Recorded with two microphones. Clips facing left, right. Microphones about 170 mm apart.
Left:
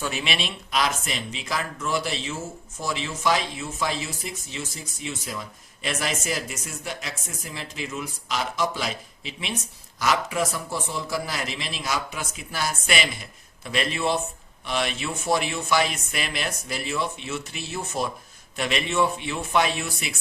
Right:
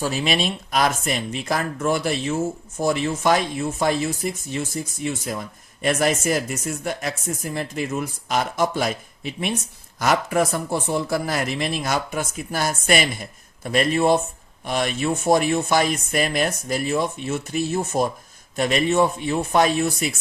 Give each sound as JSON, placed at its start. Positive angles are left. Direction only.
{"t": 0.0, "sound": "speech", "side_deg": -40}